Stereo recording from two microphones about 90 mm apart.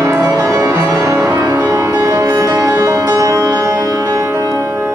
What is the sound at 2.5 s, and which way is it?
Music, 30° right (ahead or behind).